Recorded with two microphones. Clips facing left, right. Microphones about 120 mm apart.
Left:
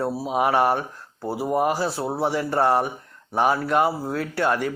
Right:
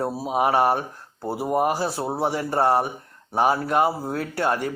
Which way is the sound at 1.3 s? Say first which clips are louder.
Even; 15° right (ahead or behind).